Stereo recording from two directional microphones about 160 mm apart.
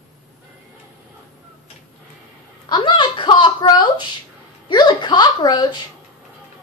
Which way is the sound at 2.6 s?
30° left (ahead or behind).